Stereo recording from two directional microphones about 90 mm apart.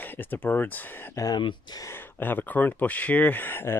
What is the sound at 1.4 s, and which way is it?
Speech, 60° left (ahead or behind).